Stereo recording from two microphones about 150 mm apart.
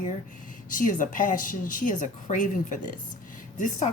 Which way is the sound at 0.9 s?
60° left (ahead or behind).